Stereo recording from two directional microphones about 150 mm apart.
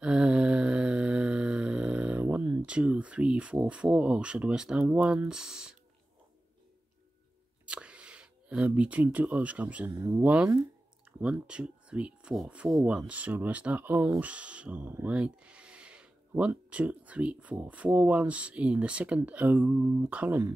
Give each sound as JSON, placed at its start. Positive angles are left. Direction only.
{"t": 0.0, "sound": "a sound", "side_deg": -5}
{"t": 2.6, "sound": "speech", "side_deg": -10}
{"t": 7.6, "sound": "speech", "side_deg": -5}
{"t": 9.8, "sound": "speech", "side_deg": -20}
{"t": 10.2, "sound": "speech", "side_deg": -10}